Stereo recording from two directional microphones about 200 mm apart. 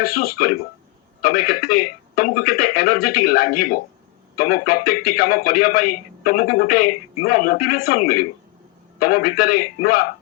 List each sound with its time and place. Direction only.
0.0 s speech: 50° left (ahead or behind)